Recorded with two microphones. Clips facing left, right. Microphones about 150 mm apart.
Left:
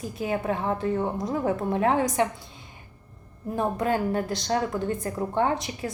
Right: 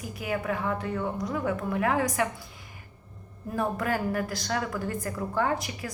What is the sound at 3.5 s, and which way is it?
A woman's voice, 25° left (ahead or behind).